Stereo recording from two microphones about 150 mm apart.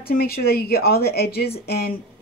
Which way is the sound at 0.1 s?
90° left.